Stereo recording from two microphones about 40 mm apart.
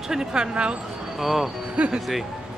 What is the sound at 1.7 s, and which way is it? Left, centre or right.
Speech, right.